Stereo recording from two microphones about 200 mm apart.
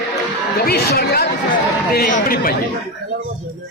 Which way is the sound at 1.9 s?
45° left (ahead or behind).